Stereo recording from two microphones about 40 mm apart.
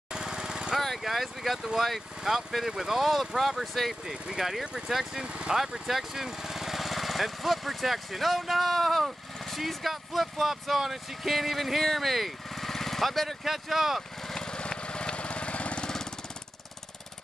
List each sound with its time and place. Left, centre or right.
0.1 s lawn mower: centre
0.7 s vehicle: centre
1.0 s speech: centre
4.0 s speech: centre
5.2 s speech: right
5.6 s speech: centre
13.4 s speech: centre
14.2 s lawn mower: centre; by 15.8 s left
15.8 s jackhammer: centre